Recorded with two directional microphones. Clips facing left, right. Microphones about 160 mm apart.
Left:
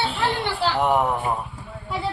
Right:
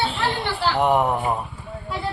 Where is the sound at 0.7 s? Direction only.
Centre (ahead or behind).